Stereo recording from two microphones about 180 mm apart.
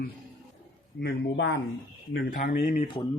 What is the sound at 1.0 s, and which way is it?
Speech, 75° left (ahead or behind).